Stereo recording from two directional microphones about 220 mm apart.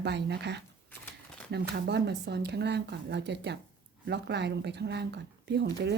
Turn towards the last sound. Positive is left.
turn(degrees=-50)  # may be behind; listen again after turning